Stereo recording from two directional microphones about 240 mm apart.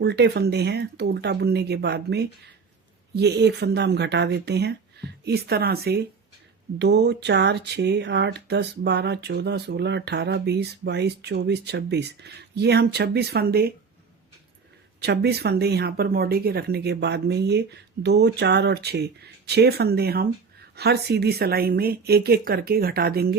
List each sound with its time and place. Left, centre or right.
0.0 s speech: right
15.0 s speech: right